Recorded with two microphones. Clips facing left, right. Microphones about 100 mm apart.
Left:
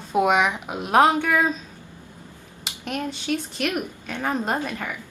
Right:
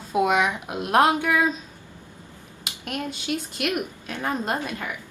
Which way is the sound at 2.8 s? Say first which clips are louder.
Left 2 dB; 5° right (ahead or behind).